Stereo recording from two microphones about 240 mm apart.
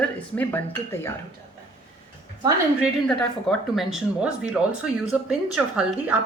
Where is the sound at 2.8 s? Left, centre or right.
Centre.